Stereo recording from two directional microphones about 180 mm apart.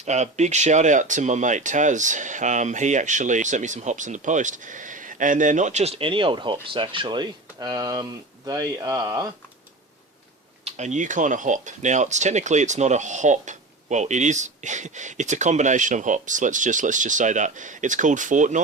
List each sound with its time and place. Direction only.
0.0 s speech: 40° right (ahead or behind); by 9.2 s 20° right (ahead or behind)
10.7 s speech: 40° right (ahead or behind)